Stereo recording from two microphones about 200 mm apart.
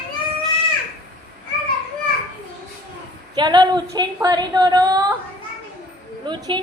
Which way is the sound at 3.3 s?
20° right (ahead or behind).